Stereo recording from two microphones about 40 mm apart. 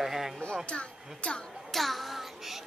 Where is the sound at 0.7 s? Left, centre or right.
Left.